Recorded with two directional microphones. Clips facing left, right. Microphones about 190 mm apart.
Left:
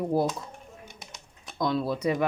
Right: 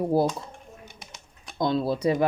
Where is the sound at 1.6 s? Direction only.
25° right (ahead or behind).